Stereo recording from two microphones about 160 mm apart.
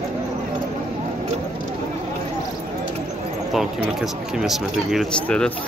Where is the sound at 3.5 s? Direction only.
Centre (ahead or behind).